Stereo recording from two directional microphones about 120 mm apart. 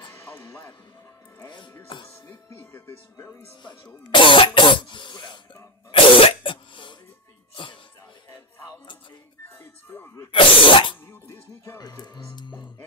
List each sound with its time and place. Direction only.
1.9 s music: 45° left (ahead or behind)
2.6 s speech: 20° left (ahead or behind)
4.1 s cough: 45° left (ahead or behind)
7.5 s music: 45° left (ahead or behind)
9.6 s speech: 15° left (ahead or behind)
10.3 s cough: 45° left (ahead or behind)
11.1 s speech: 20° left (ahead or behind); by 12.6 s 40° left (ahead or behind)